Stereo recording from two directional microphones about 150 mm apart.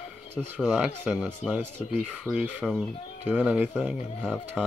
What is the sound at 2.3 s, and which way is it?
Speech, 20° left (ahead or behind).